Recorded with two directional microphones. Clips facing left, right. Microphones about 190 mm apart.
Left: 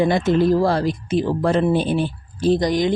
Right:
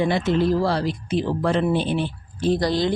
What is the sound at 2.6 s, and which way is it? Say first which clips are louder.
Speech: left 2 dB; 15° left (ahead or behind).